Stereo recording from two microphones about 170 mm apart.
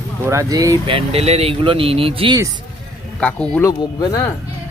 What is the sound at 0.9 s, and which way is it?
Speech, 35° right (ahead or behind).